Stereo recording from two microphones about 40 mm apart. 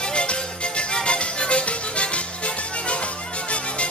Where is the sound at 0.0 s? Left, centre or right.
Left.